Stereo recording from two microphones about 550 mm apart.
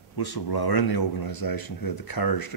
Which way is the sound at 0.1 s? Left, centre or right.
Left.